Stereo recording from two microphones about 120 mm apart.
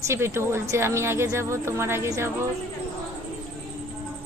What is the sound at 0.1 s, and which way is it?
Speech, 20° right (ahead or behind).